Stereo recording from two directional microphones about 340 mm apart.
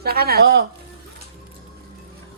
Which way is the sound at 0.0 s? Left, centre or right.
Right.